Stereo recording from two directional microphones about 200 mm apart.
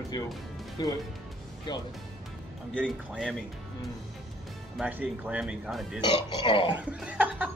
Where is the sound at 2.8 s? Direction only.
Centre (ahead or behind).